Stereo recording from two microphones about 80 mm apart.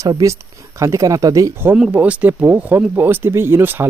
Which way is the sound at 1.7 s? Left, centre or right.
Centre.